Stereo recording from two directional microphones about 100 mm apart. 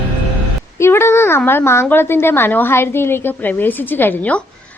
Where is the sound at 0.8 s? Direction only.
25° left (ahead or behind).